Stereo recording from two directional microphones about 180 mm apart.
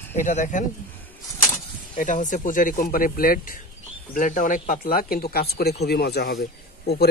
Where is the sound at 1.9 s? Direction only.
45° left (ahead or behind).